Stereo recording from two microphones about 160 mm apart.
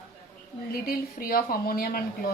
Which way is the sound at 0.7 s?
65° left (ahead or behind).